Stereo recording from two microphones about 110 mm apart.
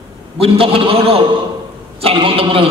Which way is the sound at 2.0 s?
60° right (ahead or behind).